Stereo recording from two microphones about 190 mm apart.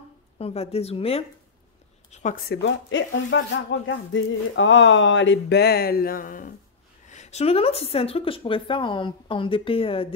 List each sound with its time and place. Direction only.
0.4 s a woman's voice: 30° left (ahead or behind)